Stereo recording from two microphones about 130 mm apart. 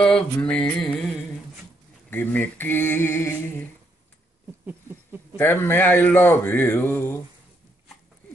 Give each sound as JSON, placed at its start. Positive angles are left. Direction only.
{"t": 0.0, "sound": "speech", "side_deg": 5}
{"t": 2.0, "sound": "speech", "side_deg": 15}
{"t": 5.3, "sound": "speech", "side_deg": 15}